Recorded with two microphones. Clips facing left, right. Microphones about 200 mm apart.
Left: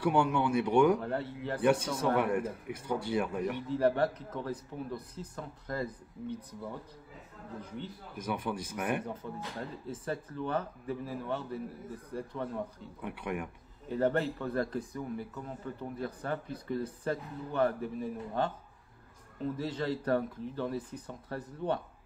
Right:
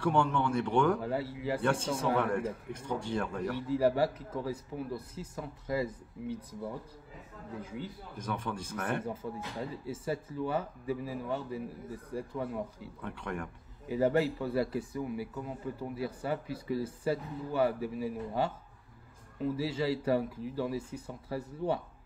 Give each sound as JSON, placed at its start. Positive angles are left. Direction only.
{"t": 0.0, "sound": "speech", "side_deg": 10}
{"t": 0.9, "sound": "speech", "side_deg": -5}
{"t": 1.6, "sound": "speech", "side_deg": 15}
{"t": 1.9, "sound": "speech", "side_deg": -10}
{"t": 2.1, "sound": "speech", "side_deg": 5}
{"t": 3.6, "sound": "speech", "side_deg": -5}
{"t": 8.2, "sound": "speech", "side_deg": 10}
{"t": 9.2, "sound": "speech", "side_deg": -10}
{"t": 13.0, "sound": "speech", "side_deg": 15}
{"t": 13.8, "sound": "speech", "side_deg": -5}